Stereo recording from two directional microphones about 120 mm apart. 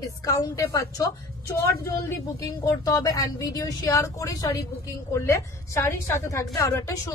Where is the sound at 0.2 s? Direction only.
30° left (ahead or behind).